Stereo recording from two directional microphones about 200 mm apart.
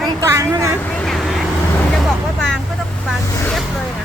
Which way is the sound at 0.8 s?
5° left (ahead or behind).